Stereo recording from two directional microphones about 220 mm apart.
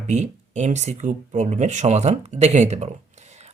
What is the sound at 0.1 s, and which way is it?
Speech, 30° right (ahead or behind).